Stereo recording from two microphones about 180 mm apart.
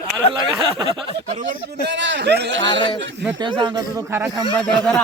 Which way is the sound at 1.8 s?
75° right (ahead or behind).